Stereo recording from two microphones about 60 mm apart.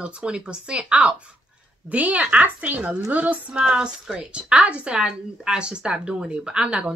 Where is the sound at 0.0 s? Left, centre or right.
Centre.